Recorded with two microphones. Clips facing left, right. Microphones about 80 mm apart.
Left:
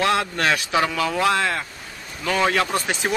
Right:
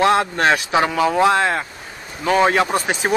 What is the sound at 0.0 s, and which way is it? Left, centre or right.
Speech, right.